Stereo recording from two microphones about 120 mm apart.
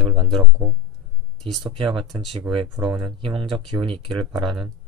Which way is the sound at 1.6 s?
40° right (ahead or behind).